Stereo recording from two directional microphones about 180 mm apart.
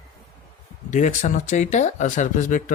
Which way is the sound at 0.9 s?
45° left (ahead or behind).